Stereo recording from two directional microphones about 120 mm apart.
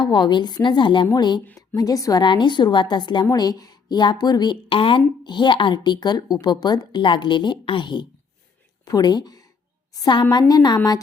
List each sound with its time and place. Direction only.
0.0 s speech: 40° left (ahead or behind)